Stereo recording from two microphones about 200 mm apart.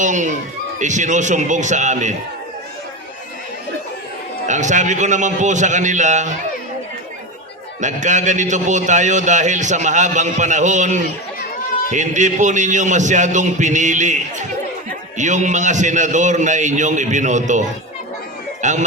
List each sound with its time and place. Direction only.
0.0 s a man's voice: 40° right (ahead or behind)
4.4 s a man's voice: 35° right (ahead or behind)
7.8 s a man's voice: 35° right (ahead or behind)